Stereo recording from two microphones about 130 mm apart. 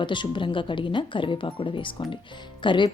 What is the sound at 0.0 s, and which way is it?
Speech, 40° left (ahead or behind).